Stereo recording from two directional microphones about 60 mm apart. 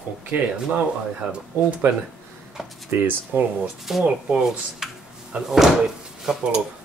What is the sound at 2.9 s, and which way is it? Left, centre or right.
Speech, right.